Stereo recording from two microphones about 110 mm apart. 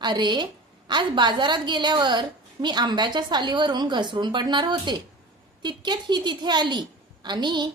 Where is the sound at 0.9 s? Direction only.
45° right (ahead or behind).